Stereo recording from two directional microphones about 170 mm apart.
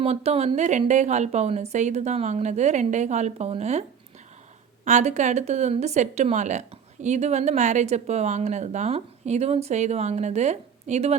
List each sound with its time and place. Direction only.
0.0 s speech: 35° right (ahead or behind)
4.9 s speech: 45° right (ahead or behind)